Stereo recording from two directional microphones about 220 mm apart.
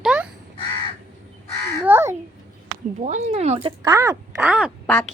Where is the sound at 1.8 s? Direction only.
10° right (ahead or behind).